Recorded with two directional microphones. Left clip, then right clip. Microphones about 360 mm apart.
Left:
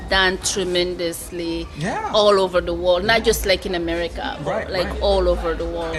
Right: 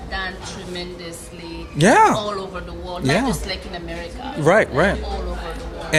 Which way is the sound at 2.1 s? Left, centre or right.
Left.